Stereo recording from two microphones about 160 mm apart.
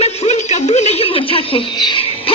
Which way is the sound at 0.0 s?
45° left (ahead or behind).